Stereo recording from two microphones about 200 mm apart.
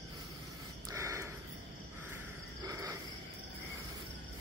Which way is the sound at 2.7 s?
15° right (ahead or behind).